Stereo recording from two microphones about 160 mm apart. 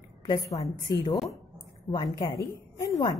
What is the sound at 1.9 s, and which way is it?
A woman's voice, 25° left (ahead or behind).